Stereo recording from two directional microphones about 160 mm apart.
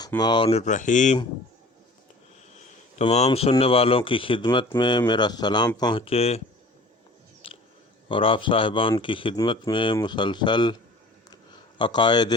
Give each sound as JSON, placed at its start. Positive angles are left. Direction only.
{"t": 0.2, "sound": "speech", "side_deg": 30}
{"t": 0.6, "sound": "speech", "side_deg": 50}
{"t": 3.0, "sound": "speech", "side_deg": 40}
{"t": 8.1, "sound": "speech", "side_deg": 35}
{"t": 11.8, "sound": "speech", "side_deg": 30}